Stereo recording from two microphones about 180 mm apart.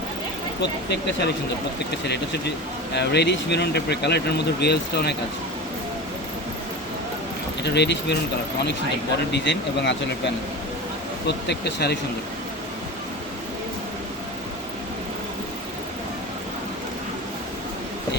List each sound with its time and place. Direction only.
0.6 s speech: 70° left (ahead or behind)
7.6 s speech: 70° left (ahead or behind)
9.3 s speech: 80° left
11.3 s speech: 70° left (ahead or behind)